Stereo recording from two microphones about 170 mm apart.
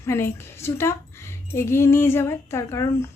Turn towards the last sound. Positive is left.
turn(degrees=15)  # may be behind; listen again after turning